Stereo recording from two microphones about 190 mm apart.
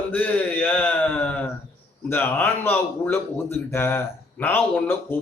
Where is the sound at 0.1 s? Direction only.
10° left (ahead or behind).